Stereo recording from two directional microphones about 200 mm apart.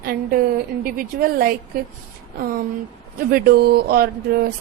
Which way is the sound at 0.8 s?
45° right (ahead or behind).